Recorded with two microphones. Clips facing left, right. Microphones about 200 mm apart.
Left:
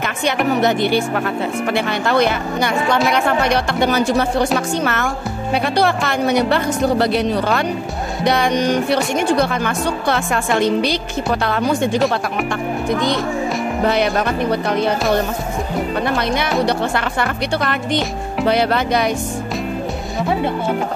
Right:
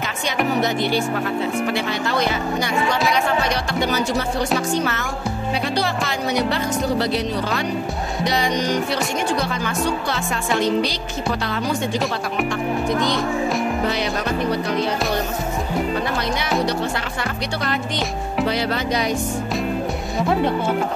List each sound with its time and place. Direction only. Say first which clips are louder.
0.6 s a woman's voice: left 4 dB; 60° left (ahead or behind)
13.8 s a woman's voice: left 5 dB; 55° left (ahead or behind)
16.6 s a woman's voice: left 4 dB; 60° left (ahead or behind)
20.2 s speech: even; centre (ahead or behind)